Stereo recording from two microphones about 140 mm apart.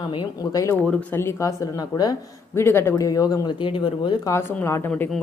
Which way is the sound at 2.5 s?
15° left (ahead or behind).